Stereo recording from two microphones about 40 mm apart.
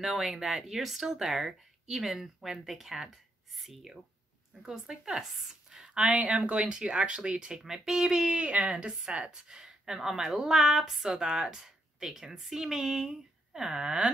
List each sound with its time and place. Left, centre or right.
0.0 s a woman's voice: centre
6.0 s speech: right; by 8.4 s centre
8.4 s speech: right